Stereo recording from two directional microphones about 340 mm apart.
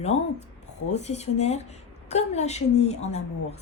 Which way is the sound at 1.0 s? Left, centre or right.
Centre.